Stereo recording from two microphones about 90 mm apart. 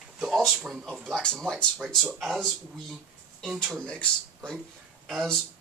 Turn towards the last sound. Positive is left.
turn(degrees=5)  # may be behind; listen again after turning